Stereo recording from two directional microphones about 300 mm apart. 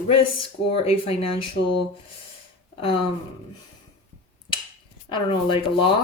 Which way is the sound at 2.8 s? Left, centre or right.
Centre.